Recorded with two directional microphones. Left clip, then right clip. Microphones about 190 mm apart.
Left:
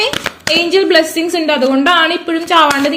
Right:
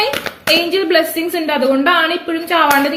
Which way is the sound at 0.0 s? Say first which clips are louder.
Left 1 dB; 40° left (ahead or behind).